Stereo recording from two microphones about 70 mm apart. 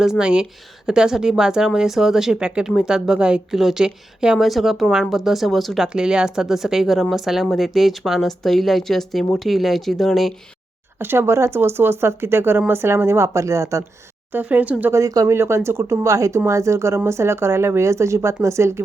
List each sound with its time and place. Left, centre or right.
0.0 s a woman's voice: centre
10.9 s speech: right
14.3 s speech: right
14.9 s speech: right
15.3 s speech: right